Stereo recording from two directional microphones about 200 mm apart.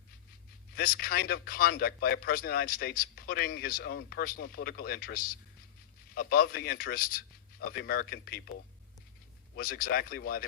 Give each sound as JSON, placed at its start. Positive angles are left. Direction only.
{"t": 0.8, "sound": "speech", "side_deg": 50}
{"t": 9.6, "sound": "speech", "side_deg": 45}